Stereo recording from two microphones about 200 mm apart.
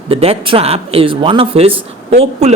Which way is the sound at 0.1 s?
30° right (ahead or behind).